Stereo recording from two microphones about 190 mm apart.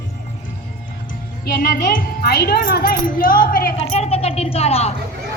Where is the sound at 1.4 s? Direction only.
50° left (ahead or behind).